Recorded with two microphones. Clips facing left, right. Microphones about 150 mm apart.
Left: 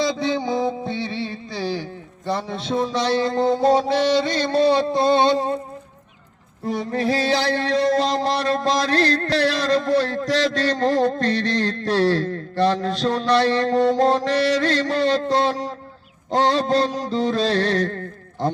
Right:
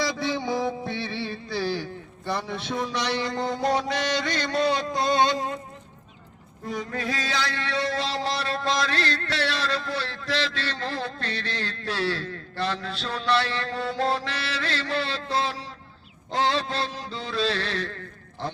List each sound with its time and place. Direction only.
0.0 s music: 20° left (ahead or behind)
2.2 s mantra: 20° left (ahead or behind)
6.7 s a sound: 35° left (ahead or behind)